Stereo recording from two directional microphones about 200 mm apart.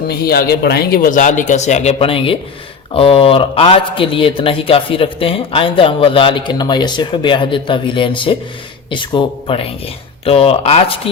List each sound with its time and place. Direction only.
0.2 s a man's voice: 50° left (ahead or behind); by 11.1 s 30° left (ahead or behind)